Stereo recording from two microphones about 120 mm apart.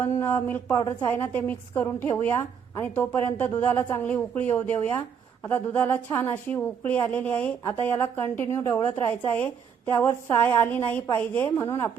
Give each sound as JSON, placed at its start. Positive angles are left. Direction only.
{"t": 0.0, "sound": "a woman's voice", "side_deg": 20}